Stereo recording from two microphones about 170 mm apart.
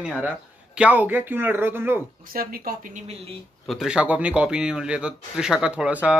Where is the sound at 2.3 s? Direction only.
60° right (ahead or behind).